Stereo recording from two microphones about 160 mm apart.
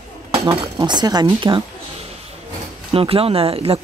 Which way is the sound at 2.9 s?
35° right (ahead or behind).